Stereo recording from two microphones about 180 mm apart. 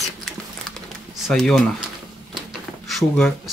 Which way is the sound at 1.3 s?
Centre (ahead or behind).